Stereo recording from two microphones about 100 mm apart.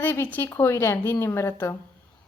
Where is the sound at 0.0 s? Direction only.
20° left (ahead or behind).